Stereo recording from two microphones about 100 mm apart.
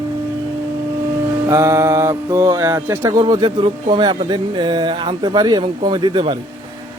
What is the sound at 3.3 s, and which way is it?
Speech, 45° right (ahead or behind).